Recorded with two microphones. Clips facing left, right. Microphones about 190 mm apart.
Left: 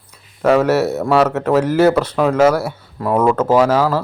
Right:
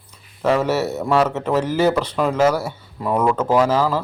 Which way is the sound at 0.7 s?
10° left (ahead or behind).